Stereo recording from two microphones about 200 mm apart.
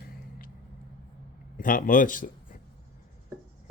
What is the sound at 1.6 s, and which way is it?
A man's voice, 40° left (ahead or behind).